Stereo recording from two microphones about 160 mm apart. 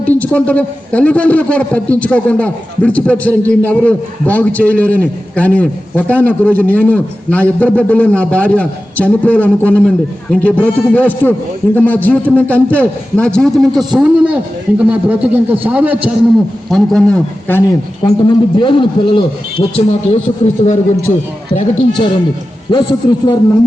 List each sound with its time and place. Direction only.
0.2 s a man's voice: 10° left (ahead or behind); by 16.1 s 10° right (ahead or behind)
16.6 s a man's voice: centre (ahead or behind)
18.0 s a man's voice: 30° left (ahead or behind)
20.7 s a man's voice: 50° left (ahead or behind)
21.8 s a man's voice: 30° left (ahead or behind)